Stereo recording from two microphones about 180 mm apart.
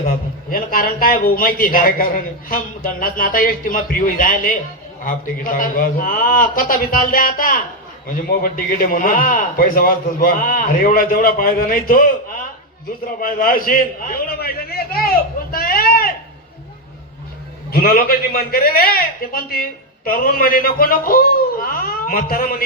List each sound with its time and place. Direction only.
0.5 s a man's voice: 55° left (ahead or behind)
17.7 s a man's voice: 55° left (ahead or behind)